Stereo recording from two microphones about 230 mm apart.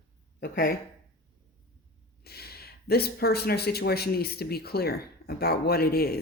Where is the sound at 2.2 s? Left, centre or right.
Left.